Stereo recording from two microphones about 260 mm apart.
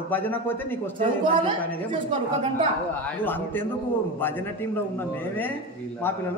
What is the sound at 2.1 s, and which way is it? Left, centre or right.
Speech, centre.